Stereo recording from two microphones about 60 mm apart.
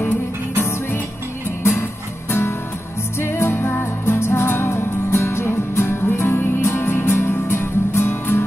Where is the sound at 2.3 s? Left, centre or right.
Left.